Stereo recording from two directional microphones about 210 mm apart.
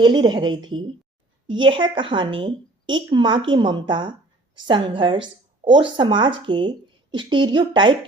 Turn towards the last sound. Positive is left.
turn(degrees=-20)  # may be behind; listen again after turning